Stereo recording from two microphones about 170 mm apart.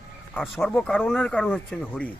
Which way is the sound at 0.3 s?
Centre (ahead or behind).